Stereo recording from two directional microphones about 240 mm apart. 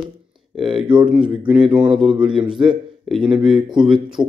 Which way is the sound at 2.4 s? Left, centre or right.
Centre.